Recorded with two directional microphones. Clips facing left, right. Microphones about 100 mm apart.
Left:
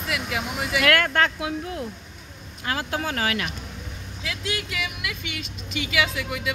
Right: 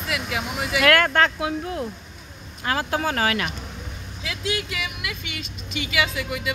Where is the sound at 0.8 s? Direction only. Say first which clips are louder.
Right 3 dB; 35° right (ahead or behind).